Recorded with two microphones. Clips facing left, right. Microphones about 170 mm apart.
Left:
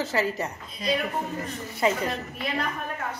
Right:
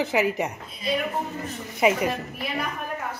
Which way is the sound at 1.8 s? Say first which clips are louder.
Right 3 dB; 15° right (ahead or behind).